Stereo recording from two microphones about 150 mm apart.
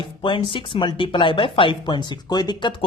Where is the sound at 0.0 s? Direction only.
35° left (ahead or behind).